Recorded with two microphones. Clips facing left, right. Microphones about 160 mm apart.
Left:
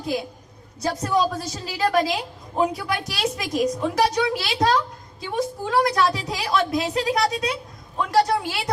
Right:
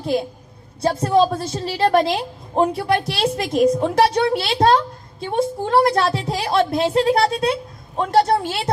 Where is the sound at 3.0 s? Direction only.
30° right (ahead or behind).